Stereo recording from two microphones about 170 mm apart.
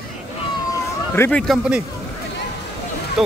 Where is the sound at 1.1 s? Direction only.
15° left (ahead or behind).